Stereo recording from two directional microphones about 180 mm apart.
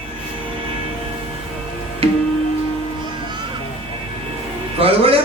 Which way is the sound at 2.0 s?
30° right (ahead or behind).